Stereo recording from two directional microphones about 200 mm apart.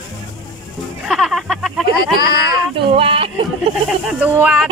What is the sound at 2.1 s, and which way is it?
Speech, 50° left (ahead or behind).